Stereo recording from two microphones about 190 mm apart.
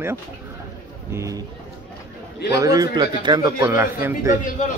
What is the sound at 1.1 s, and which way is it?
Speech, 15° right (ahead or behind).